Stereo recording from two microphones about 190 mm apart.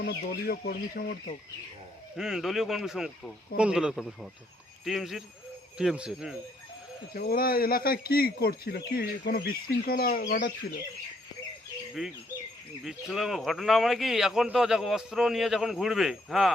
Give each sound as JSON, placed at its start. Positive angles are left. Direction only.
{"t": 0.0, "sound": "speech", "side_deg": 55}
{"t": 2.1, "sound": "a man's voice", "side_deg": -5}
{"t": 7.1, "sound": "speech", "side_deg": 55}
{"t": 12.0, "sound": "a man's voice", "side_deg": 0}